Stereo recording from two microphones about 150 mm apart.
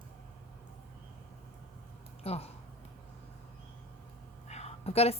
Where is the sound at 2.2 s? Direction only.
40° left (ahead or behind).